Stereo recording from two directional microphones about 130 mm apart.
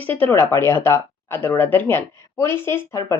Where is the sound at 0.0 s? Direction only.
15° left (ahead or behind).